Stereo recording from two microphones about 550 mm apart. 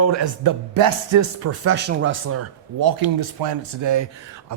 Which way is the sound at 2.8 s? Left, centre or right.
Right.